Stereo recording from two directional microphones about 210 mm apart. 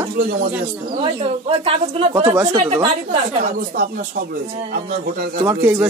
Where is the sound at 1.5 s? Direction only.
25° right (ahead or behind).